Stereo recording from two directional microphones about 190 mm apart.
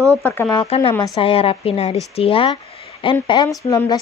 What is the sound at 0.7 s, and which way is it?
A woman's voice, 30° left (ahead or behind).